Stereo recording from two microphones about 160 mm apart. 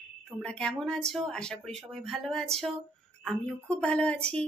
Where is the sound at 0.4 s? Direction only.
5° left (ahead or behind).